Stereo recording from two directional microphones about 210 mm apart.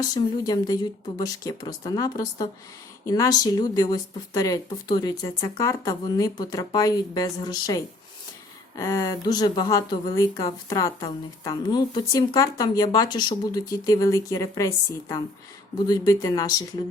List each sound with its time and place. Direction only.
0.0 s speech: 15° left (ahead or behind)
15.9 s speech: 20° left (ahead or behind)